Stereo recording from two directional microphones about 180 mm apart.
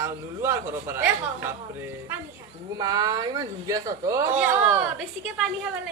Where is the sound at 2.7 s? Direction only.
20° right (ahead or behind).